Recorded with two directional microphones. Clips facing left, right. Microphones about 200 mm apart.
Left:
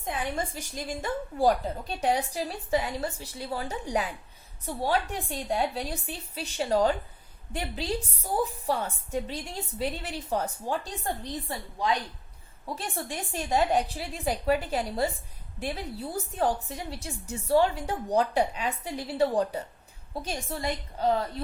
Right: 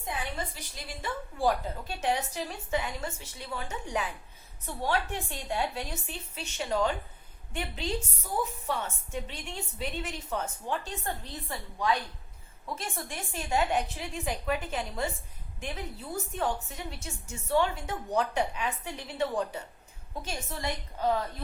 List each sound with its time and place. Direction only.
0.5 s a woman's voice: 45° left (ahead or behind)
12.6 s a woman's voice: 35° left (ahead or behind)